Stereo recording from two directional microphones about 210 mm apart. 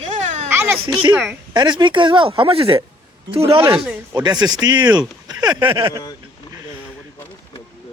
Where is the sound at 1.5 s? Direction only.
20° right (ahead or behind).